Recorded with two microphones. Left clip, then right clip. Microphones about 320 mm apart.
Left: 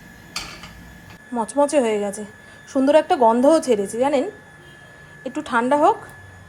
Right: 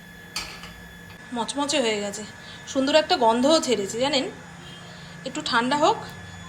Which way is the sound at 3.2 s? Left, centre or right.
Left.